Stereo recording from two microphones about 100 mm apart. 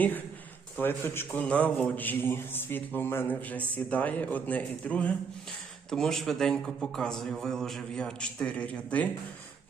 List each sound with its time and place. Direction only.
0.8 s a man's voice: 20° left (ahead or behind)